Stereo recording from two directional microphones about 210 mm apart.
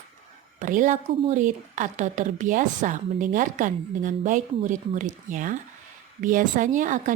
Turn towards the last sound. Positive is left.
turn(degrees=-40)  # may be behind; listen again after turning